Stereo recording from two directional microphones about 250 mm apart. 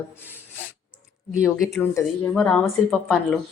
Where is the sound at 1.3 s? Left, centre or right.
Centre.